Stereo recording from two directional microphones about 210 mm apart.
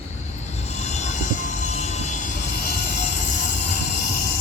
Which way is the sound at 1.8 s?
35° left (ahead or behind).